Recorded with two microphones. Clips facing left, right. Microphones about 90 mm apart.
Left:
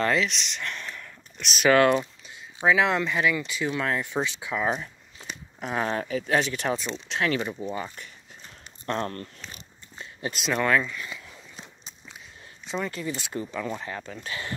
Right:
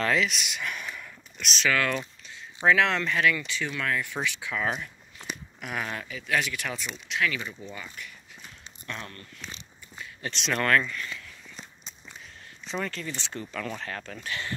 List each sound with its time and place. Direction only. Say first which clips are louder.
0.0 s a sound: left 1 dB; centre (ahead or behind)
1.7 s speech: left 8 dB; 25° left (ahead or behind)
2.6 s speech: left 1 dB; 10° left (ahead or behind)
3.6 s speech: left 3 dB; 25° left (ahead or behind); by 9.3 s 45° left (ahead or behind)
10.3 s speech: left 1 dB; 10° left (ahead or behind)
11.5 s walk: even; 5° left (ahead or behind)
12.6 s speech: left 2 dB; 5° left (ahead or behind)
12.9 s speech: left 4 dB; 15° left (ahead or behind)
14.2 s speech: right 2 dB; 20° left (ahead or behind)